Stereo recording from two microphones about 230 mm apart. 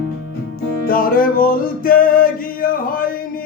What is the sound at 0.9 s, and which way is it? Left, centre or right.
Music, left.